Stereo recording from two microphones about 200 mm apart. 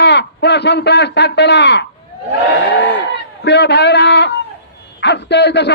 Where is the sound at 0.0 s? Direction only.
60° left (ahead or behind).